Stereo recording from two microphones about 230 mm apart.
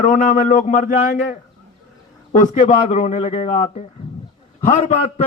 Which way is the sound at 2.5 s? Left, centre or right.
Left.